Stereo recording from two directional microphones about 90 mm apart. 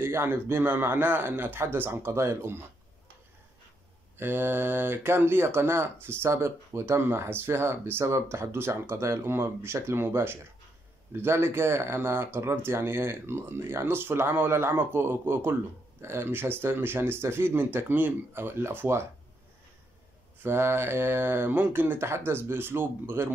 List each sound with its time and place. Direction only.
0.0 s speech: 25° right (ahead or behind)
4.2 s speech: 25° right (ahead or behind)
20.4 s speech: 25° right (ahead or behind)